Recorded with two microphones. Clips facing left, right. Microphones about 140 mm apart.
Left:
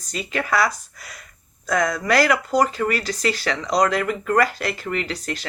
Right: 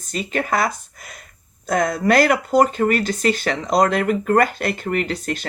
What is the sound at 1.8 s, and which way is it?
Speech, 30° right (ahead or behind).